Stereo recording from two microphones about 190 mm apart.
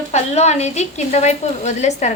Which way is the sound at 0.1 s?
35° left (ahead or behind).